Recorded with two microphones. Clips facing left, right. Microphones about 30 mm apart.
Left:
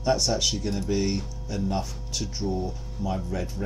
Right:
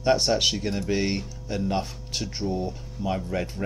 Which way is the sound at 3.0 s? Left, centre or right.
Right.